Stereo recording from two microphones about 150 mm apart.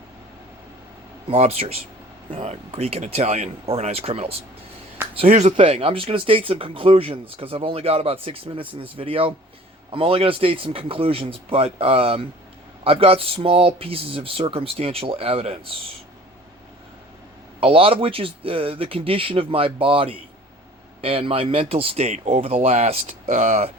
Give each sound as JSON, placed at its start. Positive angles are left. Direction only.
{"t": 1.3, "sound": "speech", "side_deg": -45}
{"t": 5.4, "sound": "speech", "side_deg": -45}
{"t": 17.6, "sound": "speech", "side_deg": -40}